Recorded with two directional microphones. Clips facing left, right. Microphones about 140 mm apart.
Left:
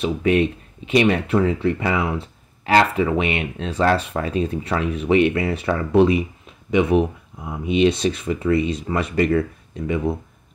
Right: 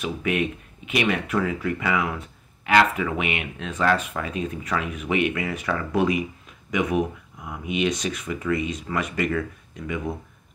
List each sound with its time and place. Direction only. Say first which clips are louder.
0.0 s speech: left 7 dB; 30° left (ahead or behind)